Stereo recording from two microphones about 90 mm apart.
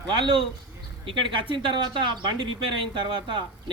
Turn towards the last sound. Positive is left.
turn(degrees=-65)  # may be behind; listen again after turning